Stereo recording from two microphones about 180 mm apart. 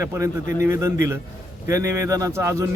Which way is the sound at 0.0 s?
15° right (ahead or behind).